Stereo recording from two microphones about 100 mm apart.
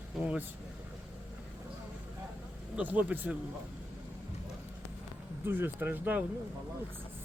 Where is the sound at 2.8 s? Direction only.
15° right (ahead or behind).